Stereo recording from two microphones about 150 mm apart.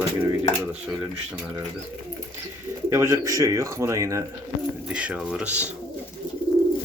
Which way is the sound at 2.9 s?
15° right (ahead or behind).